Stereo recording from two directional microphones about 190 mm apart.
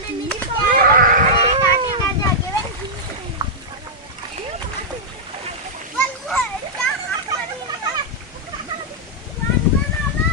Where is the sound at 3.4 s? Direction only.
20° right (ahead or behind).